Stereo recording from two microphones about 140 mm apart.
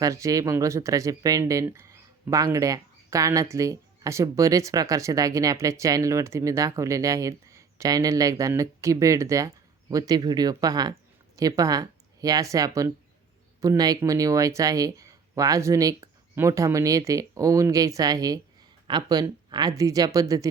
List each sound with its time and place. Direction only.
0.0 s speech: 25° right (ahead or behind)